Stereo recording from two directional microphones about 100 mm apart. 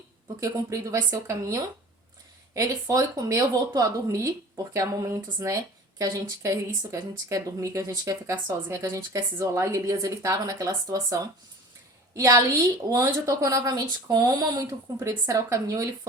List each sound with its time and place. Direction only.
0.3 s speech: 35° right (ahead or behind)